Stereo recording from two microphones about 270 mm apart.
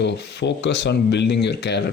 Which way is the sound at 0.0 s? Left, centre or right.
Left.